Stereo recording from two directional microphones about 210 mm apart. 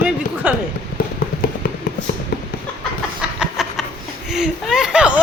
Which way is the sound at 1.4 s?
45° left (ahead or behind).